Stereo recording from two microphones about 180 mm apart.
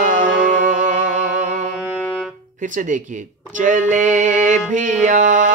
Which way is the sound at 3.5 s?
45° right (ahead or behind).